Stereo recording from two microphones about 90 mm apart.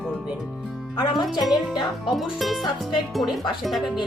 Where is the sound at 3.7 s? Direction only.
Centre (ahead or behind).